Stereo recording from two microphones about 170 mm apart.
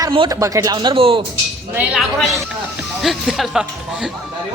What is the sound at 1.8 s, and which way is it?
Speech, 5° right (ahead or behind).